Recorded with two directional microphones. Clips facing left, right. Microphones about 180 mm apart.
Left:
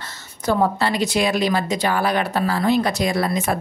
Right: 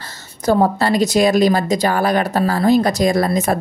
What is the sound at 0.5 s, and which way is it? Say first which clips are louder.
Speech: right 4 dB; 40° right (ahead or behind).